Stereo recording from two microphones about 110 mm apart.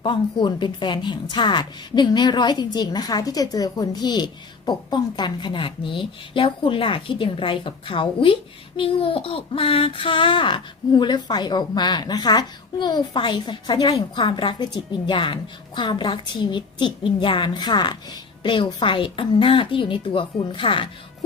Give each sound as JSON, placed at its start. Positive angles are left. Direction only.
{"t": 0.0, "sound": "a woman's voice", "side_deg": 45}